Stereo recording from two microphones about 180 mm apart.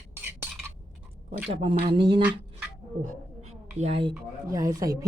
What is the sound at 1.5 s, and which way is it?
Speech, 30° right (ahead or behind).